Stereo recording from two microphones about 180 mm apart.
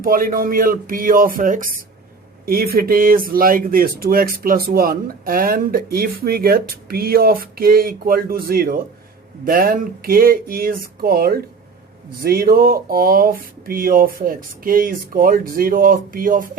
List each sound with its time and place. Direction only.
0.0 s speech: 50° right (ahead or behind)